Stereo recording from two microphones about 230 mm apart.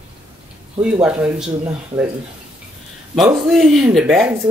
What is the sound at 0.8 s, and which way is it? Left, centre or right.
Speech, centre.